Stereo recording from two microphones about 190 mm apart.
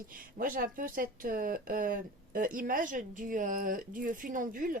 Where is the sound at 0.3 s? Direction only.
50° right (ahead or behind).